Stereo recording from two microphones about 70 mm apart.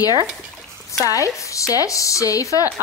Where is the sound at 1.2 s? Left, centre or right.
Left.